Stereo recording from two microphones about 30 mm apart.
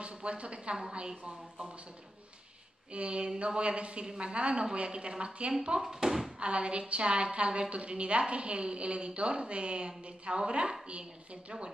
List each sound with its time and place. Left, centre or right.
0.0 s a woman's voice: right
2.9 s a woman's voice: right
6.0 s speech: centre
6.4 s a woman's voice: right